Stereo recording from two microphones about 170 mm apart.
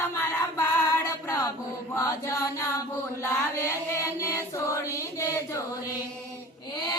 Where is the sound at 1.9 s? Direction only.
15° left (ahead or behind).